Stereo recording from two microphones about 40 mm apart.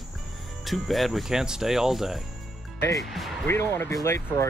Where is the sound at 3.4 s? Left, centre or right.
Left.